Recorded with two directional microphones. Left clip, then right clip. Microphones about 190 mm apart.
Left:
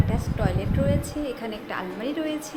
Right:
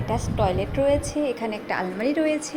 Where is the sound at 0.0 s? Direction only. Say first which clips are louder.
Right 5 dB; 20° right (ahead or behind).